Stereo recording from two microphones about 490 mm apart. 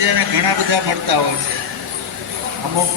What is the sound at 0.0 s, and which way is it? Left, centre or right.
A man's voice, right.